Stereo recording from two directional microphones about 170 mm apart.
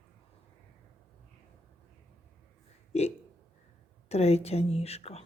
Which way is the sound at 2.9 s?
40° left (ahead or behind).